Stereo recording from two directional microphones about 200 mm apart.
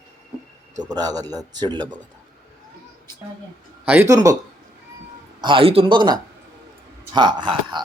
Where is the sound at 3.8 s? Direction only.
10° right (ahead or behind).